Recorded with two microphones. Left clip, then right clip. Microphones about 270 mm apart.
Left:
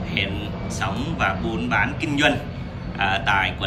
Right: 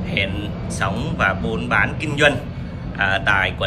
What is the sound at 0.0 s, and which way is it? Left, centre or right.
A man's voice, centre.